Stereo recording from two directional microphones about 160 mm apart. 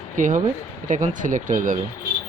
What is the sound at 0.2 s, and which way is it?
Speech, 55° right (ahead or behind).